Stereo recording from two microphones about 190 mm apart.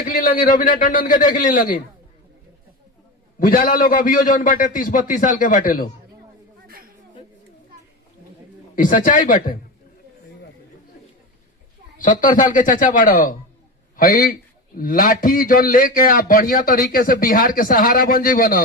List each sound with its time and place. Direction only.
0.0 s a man's voice: 45° left (ahead or behind)
3.4 s a man's voice: 45° left (ahead or behind)
8.7 s a man's voice: 45° left (ahead or behind)
11.9 s a man's voice: 45° left (ahead or behind)